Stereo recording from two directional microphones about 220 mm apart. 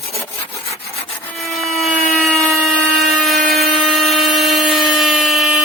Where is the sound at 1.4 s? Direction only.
Centre (ahead or behind).